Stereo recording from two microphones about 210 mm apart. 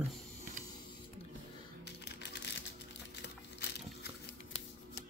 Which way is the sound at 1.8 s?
55° left (ahead or behind).